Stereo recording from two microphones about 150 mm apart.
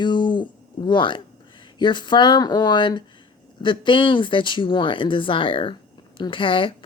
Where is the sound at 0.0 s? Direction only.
30° left (ahead or behind).